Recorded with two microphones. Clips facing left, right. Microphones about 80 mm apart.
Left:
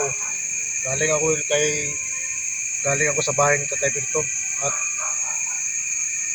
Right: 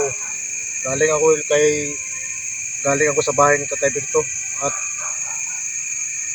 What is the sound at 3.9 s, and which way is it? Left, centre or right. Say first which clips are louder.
Speech: right 7 dB; centre.